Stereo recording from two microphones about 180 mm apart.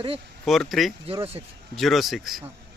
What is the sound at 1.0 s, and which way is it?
Speech, 35° right (ahead or behind).